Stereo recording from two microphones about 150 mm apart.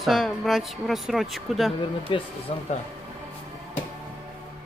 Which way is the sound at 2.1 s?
35° left (ahead or behind).